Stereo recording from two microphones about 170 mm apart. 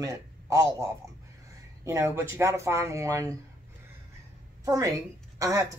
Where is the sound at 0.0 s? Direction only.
15° right (ahead or behind).